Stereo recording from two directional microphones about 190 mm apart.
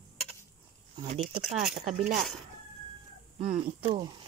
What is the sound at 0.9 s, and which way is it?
Speech, 35° right (ahead or behind).